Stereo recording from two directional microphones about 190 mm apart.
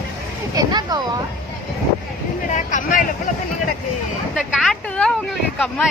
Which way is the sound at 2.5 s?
45° left (ahead or behind).